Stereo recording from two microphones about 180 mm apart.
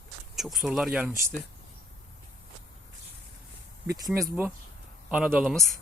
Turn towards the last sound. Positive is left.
turn(degrees=0)  # may be behind; listen again after turning